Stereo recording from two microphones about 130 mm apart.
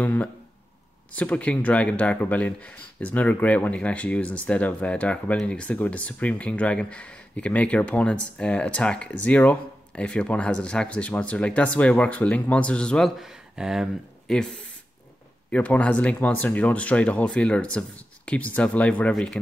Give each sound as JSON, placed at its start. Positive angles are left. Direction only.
{"t": 0.0, "sound": "speech", "side_deg": 10}
{"t": 15.5, "sound": "speech", "side_deg": 10}